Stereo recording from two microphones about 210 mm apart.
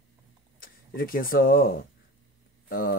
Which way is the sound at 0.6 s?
45° left (ahead or behind).